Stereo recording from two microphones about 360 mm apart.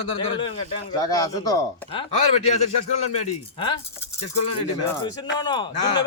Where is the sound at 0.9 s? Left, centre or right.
Centre.